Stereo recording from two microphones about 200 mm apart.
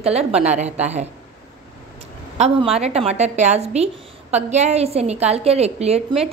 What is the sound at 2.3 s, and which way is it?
A woman's voice, 30° right (ahead or behind).